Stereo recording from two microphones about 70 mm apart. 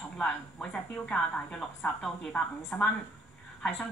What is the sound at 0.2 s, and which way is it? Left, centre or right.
A woman's voice, centre.